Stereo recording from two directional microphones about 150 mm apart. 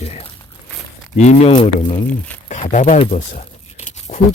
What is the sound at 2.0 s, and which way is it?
Speech, 10° left (ahead or behind).